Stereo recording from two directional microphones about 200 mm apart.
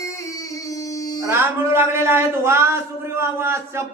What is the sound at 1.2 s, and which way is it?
A man's voice, 10° right (ahead or behind).